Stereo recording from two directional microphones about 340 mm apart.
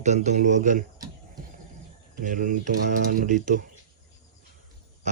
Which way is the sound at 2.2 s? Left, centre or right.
Right.